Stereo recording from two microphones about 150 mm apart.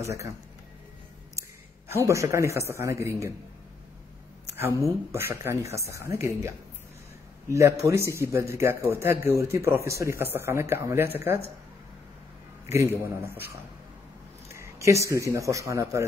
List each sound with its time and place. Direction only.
0.0 s speech: 20° right (ahead or behind)
2.0 s speech: 20° right (ahead or behind)
4.6 s a man's voice: 15° right (ahead or behind)
12.6 s a man's voice: 20° right (ahead or behind)
14.5 s speech: 20° right (ahead or behind)